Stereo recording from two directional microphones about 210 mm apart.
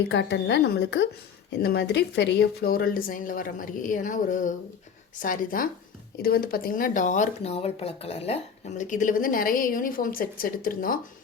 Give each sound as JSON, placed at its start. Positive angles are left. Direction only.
{"t": 0.1, "sound": "a woman's voice", "side_deg": 55}